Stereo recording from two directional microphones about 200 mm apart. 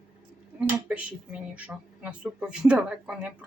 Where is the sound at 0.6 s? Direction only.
5° right (ahead or behind).